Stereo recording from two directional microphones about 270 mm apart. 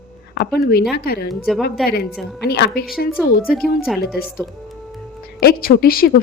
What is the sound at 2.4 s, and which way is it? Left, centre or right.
A woman's voice, left.